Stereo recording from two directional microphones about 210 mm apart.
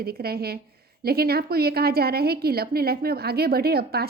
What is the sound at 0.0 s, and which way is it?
A woman's voice, 50° right (ahead or behind).